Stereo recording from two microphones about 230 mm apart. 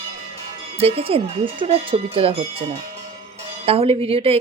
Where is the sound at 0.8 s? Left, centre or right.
Right.